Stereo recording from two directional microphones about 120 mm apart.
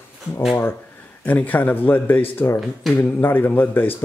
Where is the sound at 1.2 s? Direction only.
15° left (ahead or behind).